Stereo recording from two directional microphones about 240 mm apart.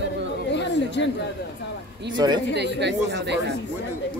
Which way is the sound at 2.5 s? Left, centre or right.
Right.